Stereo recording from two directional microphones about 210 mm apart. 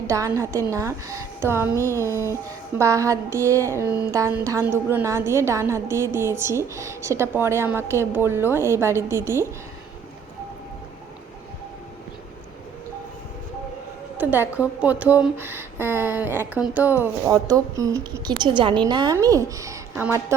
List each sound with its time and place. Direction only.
0.1 s speech: 15° right (ahead or behind)
2.7 s speech: 15° right (ahead or behind)
14.2 s speech: 10° right (ahead or behind)